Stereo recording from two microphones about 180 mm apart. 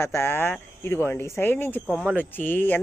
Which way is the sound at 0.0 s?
15° left (ahead or behind).